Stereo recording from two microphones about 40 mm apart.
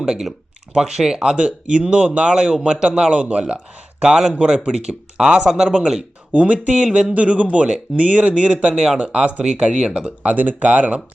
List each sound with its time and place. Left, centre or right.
0.0 s speech: centre
6.3 s speech: right
9.4 s speech: centre
10.2 s speech: right